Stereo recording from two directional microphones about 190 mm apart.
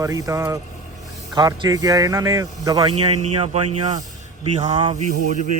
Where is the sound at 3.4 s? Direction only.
35° right (ahead or behind).